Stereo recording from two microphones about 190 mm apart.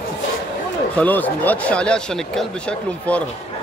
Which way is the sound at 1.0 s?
10° left (ahead or behind).